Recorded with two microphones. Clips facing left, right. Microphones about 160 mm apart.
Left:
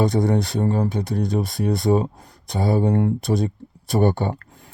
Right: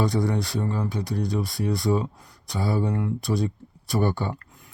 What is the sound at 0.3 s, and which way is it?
Speech, 25° left (ahead or behind).